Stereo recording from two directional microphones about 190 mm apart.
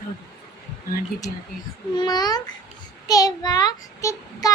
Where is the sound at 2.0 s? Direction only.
20° left (ahead or behind).